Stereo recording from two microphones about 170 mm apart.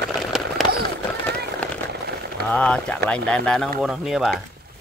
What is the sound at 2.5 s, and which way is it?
Speech, 5° left (ahead or behind).